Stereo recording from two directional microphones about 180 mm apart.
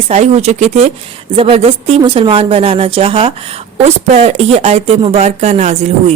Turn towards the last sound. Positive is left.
turn(degrees=-40)  # may be behind; listen again after turning